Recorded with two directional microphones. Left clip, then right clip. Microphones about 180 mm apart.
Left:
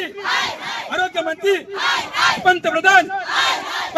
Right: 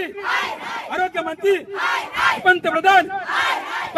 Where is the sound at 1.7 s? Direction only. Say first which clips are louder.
Left 2 dB; 5° right (ahead or behind).